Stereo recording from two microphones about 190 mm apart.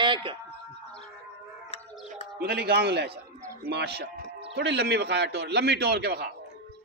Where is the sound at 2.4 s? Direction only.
55° right (ahead or behind).